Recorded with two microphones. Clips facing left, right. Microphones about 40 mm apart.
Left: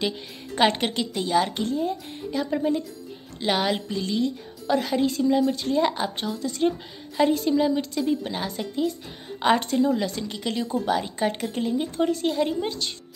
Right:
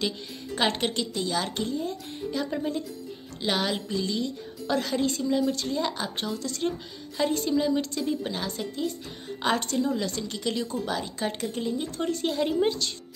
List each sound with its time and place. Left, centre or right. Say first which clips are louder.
0.6 s speech: left 4 dB; centre
6.1 s speech: left 3 dB; centre
12.1 s a woman's voice: left 3 dB; centre